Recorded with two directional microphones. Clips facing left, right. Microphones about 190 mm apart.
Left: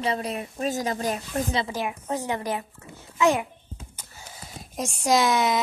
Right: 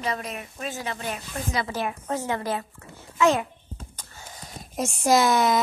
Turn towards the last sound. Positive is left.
turn(degrees=0)  # may be behind; listen again after turning